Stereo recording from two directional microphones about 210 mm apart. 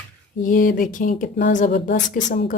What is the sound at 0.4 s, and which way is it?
Speech, 40° left (ahead or behind).